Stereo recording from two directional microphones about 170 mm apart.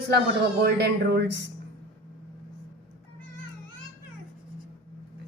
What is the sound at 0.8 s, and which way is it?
Speech, 85° right.